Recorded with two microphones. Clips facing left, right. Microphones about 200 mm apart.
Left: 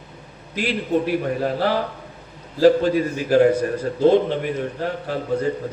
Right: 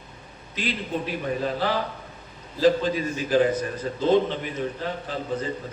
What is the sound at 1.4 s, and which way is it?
A man's voice, 65° left (ahead or behind).